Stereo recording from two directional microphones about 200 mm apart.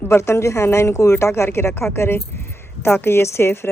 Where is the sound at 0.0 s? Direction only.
15° left (ahead or behind).